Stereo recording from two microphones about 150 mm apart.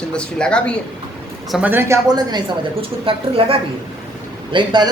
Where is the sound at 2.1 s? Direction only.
30° right (ahead or behind).